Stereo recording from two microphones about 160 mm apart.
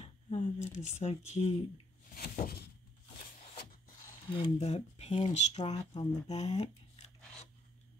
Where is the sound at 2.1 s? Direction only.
65° left (ahead or behind).